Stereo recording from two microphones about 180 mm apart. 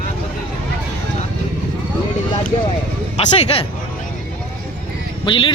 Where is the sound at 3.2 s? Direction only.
35° left (ahead or behind).